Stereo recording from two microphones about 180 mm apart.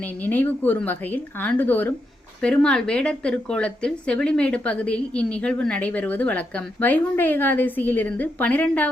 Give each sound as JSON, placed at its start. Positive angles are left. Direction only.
{"t": 0.0, "sound": "speech", "side_deg": 10}